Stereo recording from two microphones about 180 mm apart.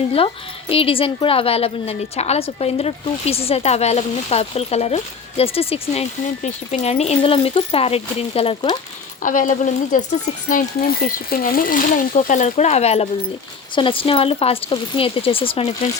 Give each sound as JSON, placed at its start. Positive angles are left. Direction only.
{"t": 0.7, "sound": "a woman's voice", "side_deg": 30}
{"t": 9.2, "sound": "speech", "side_deg": 45}
{"t": 11.0, "sound": "a woman's voice", "side_deg": 55}